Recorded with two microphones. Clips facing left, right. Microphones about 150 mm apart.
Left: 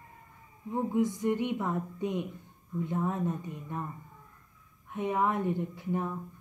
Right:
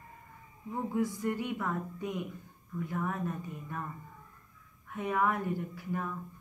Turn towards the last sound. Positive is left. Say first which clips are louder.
# left 4 dB
turn(degrees=20)  # may be behind; listen again after turning